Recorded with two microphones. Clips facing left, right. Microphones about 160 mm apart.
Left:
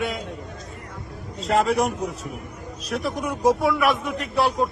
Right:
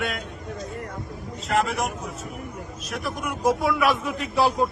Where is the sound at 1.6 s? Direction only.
30° left (ahead or behind).